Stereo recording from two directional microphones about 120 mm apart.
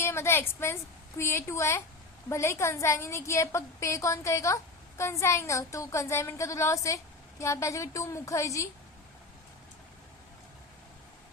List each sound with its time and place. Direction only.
0.0 s a woman's voice: 20° left (ahead or behind)